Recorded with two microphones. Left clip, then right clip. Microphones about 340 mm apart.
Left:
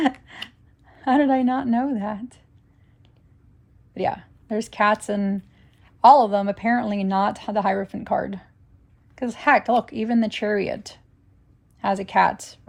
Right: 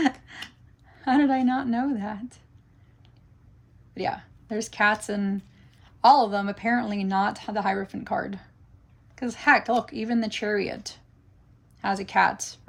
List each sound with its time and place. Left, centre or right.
0.3 s a sound: left
0.9 s speech: left
3.9 s speech: left